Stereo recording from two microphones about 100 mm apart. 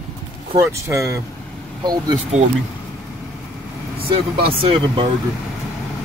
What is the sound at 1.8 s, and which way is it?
Speech, 45° right (ahead or behind).